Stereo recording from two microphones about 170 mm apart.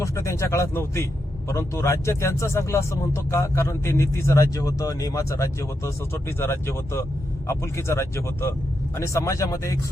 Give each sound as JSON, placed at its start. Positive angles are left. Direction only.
{"t": 0.0, "sound": "speech", "side_deg": 15}